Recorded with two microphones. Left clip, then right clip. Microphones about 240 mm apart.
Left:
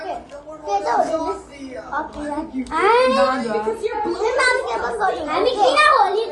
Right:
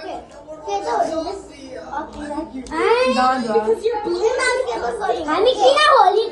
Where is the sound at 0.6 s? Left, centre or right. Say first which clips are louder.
Left 2 dB; left.